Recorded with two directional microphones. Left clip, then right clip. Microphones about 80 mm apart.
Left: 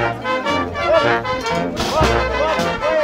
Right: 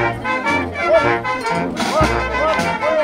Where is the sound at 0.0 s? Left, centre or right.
Left.